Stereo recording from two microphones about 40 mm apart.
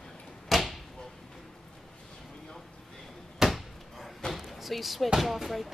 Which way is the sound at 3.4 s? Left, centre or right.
Centre.